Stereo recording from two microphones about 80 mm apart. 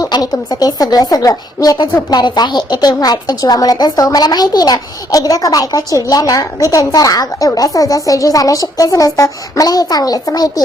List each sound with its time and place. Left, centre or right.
0.0 s a woman's voice: left
2.0 s a woman's voice: left